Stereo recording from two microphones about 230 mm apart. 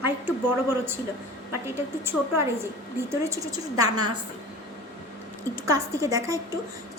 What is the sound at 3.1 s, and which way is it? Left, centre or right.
A woman's voice, centre.